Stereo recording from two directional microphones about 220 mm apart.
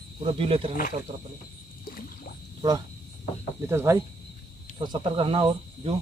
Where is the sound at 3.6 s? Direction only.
10° right (ahead or behind).